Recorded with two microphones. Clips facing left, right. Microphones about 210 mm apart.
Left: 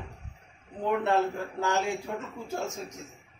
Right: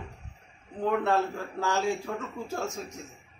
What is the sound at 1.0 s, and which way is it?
A man's voice, 20° left (ahead or behind).